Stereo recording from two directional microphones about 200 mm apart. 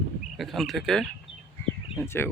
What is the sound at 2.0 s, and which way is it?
Speech, 10° left (ahead or behind).